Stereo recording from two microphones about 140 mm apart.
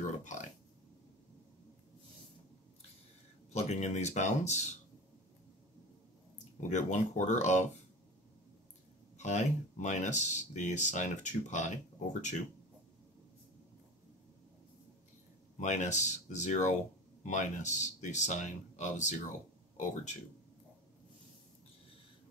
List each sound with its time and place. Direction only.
0.0 s a sound: 60° left (ahead or behind)
3.5 s speech: 50° left (ahead or behind)
6.3 s speech: 60° left (ahead or behind)
9.2 s speech: 60° left (ahead or behind)
15.5 s speech: 60° left (ahead or behind)